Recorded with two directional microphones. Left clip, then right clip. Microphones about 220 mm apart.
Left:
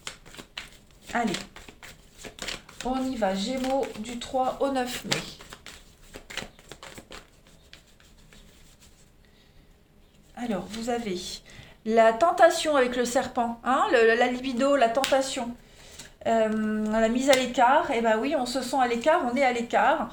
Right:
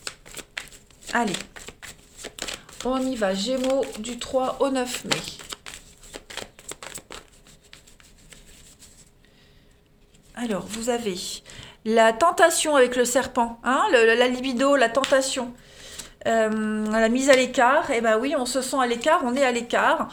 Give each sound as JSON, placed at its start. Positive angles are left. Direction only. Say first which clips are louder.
{"t": 1.9, "sound": "a sound", "louder": "right 4 dB", "side_deg": -35}
{"t": 3.1, "sound": "a woman's voice", "louder": "right 3 dB", "side_deg": -45}
{"t": 10.3, "sound": "a woman's voice", "louder": "right 3 dB", "side_deg": -40}